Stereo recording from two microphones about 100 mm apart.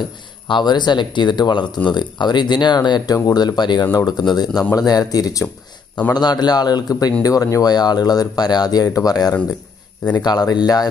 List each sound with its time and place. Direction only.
0.5 s speech: 50° left (ahead or behind)